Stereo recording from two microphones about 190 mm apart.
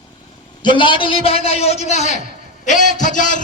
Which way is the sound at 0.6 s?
25° left (ahead or behind).